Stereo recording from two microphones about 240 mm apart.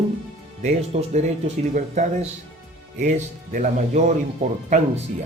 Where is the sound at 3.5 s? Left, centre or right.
Right.